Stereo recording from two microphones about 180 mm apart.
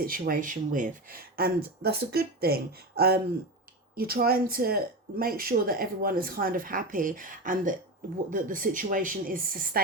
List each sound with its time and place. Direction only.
0.0 s speech: 55° right (ahead or behind)